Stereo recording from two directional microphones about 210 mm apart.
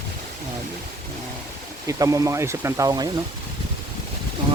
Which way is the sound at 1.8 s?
15° right (ahead or behind).